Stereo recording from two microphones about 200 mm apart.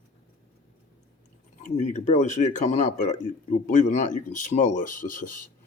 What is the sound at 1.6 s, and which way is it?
Speech, 40° left (ahead or behind).